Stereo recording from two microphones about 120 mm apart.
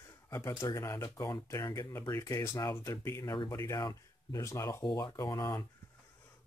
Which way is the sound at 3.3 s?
40° left (ahead or behind).